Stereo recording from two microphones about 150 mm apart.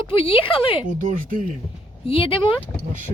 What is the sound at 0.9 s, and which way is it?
Speech, 65° right (ahead or behind).